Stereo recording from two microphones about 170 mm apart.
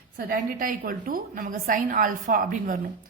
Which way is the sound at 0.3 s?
55° right (ahead or behind).